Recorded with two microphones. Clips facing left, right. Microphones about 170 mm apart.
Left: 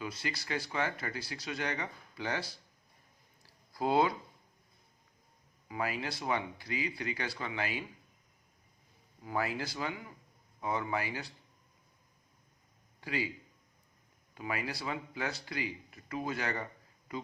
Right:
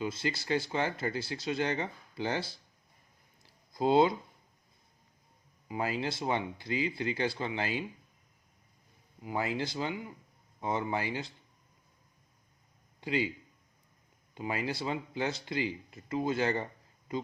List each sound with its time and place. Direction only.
0.0 s speech: 25° right (ahead or behind)
3.4 s a sound: 20° right (ahead or behind)
5.6 s speech: 25° right (ahead or behind)
9.2 s speech: 20° right (ahead or behind)
13.0 s a man's voice: 25° right (ahead or behind)
14.3 s speech: 25° right (ahead or behind)